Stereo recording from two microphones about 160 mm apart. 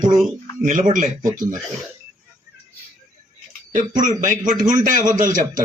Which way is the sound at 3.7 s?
55° right (ahead or behind).